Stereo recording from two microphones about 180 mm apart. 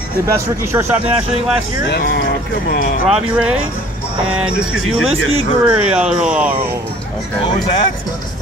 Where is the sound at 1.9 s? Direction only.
65° left (ahead or behind).